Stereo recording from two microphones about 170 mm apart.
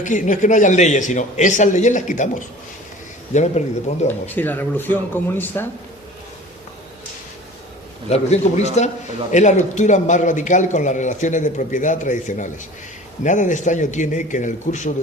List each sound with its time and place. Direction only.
0.0 s a man's voice: 45° left (ahead or behind)
4.4 s speech: 10° left (ahead or behind)
8.1 s a man's voice: 40° left (ahead or behind)